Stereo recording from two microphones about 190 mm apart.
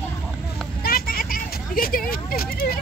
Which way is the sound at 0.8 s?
50° left (ahead or behind).